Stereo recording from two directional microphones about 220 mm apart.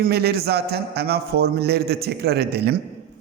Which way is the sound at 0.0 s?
45° right (ahead or behind).